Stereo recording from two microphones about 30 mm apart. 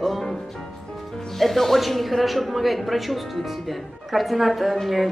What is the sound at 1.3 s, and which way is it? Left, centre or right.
Speech, centre.